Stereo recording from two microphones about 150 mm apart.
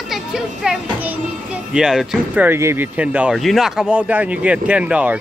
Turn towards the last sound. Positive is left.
turn(degrees=-10)  # may be behind; listen again after turning